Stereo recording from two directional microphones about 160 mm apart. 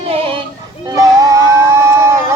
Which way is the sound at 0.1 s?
35° right (ahead or behind).